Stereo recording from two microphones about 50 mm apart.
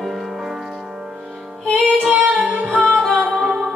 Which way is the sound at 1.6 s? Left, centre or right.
Centre.